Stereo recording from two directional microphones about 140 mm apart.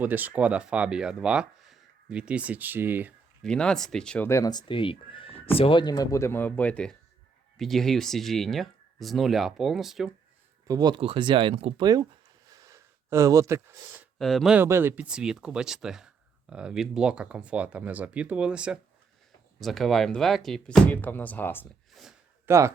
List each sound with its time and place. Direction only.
0.0 s speech: 10° right (ahead or behind)
3.4 s speech: 5° left (ahead or behind)
4.3 s speech: 25° left (ahead or behind); by 10.1 s centre (ahead or behind)
10.7 s speech: 30° right (ahead or behind)
11.8 s speech: 30° right (ahead or behind)
12.5 s a sound: 25° right (ahead or behind)
14.2 s speech: centre (ahead or behind)
14.5 s speech: 15° right (ahead or behind); by 21.7 s 15° left (ahead or behind)
22.4 s speech: 20° right (ahead or behind)